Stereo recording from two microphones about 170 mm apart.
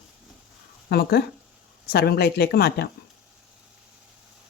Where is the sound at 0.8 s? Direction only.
70° left (ahead or behind).